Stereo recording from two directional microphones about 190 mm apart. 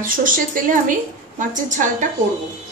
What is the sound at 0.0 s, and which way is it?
Speech, 45° right (ahead or behind).